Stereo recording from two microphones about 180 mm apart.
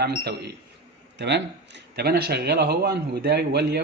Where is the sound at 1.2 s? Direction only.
70° right (ahead or behind).